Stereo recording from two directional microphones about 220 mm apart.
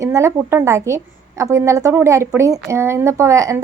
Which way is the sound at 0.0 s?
15° right (ahead or behind).